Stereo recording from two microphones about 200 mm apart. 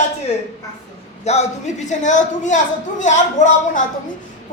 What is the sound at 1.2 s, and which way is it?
Speech, 35° left (ahead or behind).